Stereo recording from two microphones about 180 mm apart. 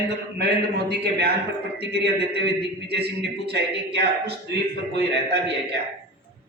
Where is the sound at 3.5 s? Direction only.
65° right (ahead or behind).